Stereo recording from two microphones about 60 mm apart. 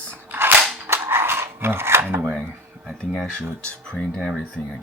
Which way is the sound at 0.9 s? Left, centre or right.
Right.